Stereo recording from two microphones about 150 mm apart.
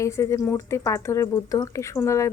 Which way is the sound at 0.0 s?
20° left (ahead or behind).